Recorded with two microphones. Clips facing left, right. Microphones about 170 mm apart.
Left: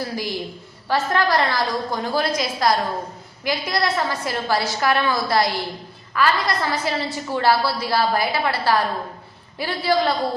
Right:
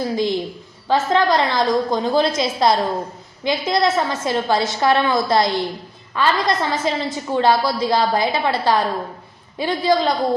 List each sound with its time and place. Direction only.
0.0 s a woman's voice: 20° right (ahead or behind)